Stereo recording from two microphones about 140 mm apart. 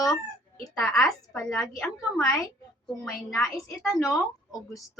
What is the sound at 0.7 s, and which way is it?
Speech, 5° left (ahead or behind).